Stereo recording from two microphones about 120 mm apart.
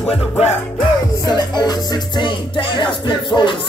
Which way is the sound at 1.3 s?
35° left (ahead or behind).